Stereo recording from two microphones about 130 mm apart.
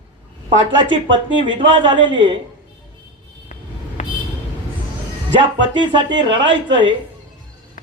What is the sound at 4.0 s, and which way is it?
Vehicle, 65° left (ahead or behind).